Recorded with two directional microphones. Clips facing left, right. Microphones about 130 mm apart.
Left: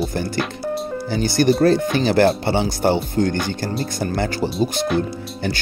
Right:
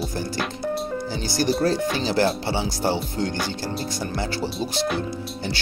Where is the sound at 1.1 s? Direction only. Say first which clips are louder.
Left 8 dB; 55° left (ahead or behind).